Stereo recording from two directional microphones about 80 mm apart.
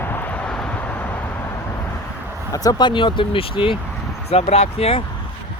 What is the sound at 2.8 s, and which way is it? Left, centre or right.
Speech, left.